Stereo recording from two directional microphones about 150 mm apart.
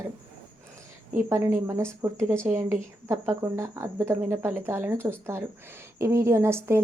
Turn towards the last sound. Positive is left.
turn(degrees=-15)  # may be behind; listen again after turning